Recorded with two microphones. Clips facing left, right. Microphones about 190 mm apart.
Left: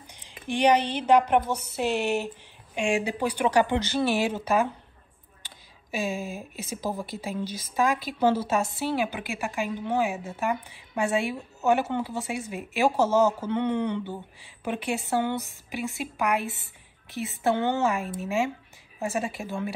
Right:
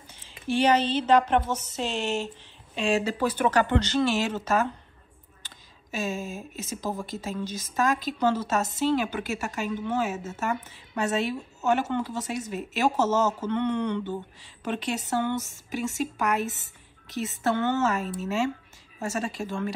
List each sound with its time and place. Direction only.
0.1 s speech: 15° left (ahead or behind)
5.4 s a sound: 10° left (ahead or behind)
6.8 s a woman's voice: 10° left (ahead or behind)
15.4 s speech: 45° right (ahead or behind)
16.0 s speech: 10° left (ahead or behind)